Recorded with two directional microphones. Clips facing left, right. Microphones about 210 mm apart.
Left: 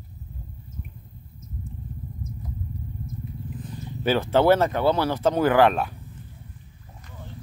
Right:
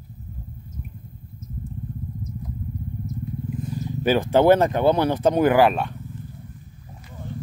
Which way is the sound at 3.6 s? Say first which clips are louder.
Right 3 dB; 10° right (ahead or behind).